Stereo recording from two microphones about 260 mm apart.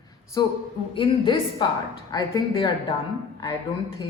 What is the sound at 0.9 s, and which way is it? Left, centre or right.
A man's voice, centre.